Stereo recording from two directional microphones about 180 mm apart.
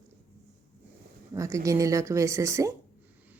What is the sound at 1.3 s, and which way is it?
Speech, 15° right (ahead or behind).